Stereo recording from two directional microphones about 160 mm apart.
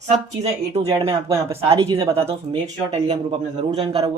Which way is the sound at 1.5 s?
35° right (ahead or behind).